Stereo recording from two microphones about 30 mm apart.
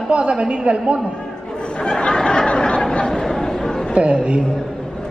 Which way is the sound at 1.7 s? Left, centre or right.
Left.